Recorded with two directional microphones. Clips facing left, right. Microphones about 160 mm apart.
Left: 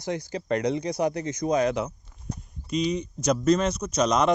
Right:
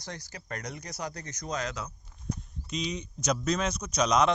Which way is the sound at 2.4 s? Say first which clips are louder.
Left 8 dB; 5° left (ahead or behind).